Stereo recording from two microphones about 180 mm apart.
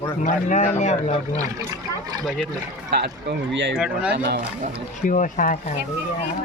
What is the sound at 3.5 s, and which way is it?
Speech, 85° right.